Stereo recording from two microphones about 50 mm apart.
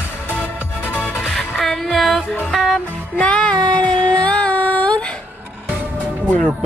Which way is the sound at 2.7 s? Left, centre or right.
Left.